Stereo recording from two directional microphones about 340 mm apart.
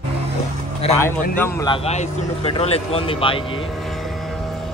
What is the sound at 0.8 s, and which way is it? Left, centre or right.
Speech, centre.